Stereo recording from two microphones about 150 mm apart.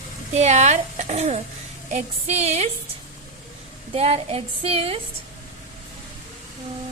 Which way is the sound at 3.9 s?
40° right (ahead or behind).